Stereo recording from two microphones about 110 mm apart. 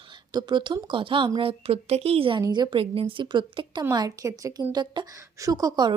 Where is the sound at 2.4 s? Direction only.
40° right (ahead or behind).